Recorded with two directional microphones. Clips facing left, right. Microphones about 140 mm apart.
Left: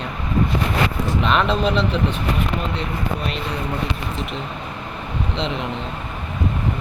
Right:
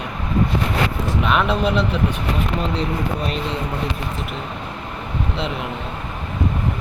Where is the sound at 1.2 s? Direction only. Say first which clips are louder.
Even; 10° right (ahead or behind).